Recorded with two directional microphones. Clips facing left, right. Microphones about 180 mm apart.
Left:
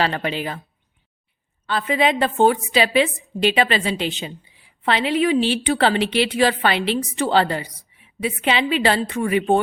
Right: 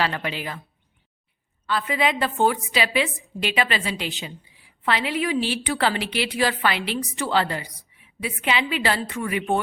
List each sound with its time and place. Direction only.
0.0 s a woman's voice: 25° left (ahead or behind)
1.6 s a woman's voice: 25° left (ahead or behind)
7.6 s a woman's voice: centre (ahead or behind)
7.9 s a woman's voice: 25° left (ahead or behind)